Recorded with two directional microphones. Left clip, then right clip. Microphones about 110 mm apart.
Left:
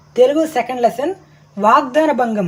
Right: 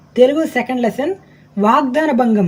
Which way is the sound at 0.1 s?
20° left (ahead or behind).